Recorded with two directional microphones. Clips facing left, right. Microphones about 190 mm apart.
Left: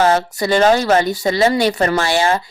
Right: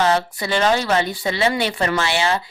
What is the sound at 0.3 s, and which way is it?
Speech, 40° left (ahead or behind).